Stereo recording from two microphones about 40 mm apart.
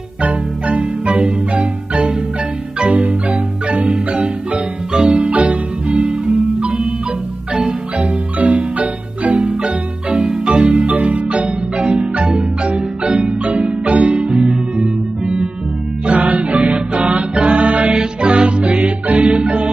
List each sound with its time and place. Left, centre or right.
0.2 s music: right
2.8 s marimba: right
4.1 s music: right
5.9 s music: centre
7.5 s marimba: right
8.4 s marimba: right
9.3 s marimba: right
10.2 s marimba: centre
10.5 s marimba: right
11.4 s marimba: right
16.1 s music: right